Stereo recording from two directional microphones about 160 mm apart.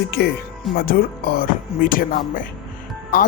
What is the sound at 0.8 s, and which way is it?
Speech, 70° left (ahead or behind).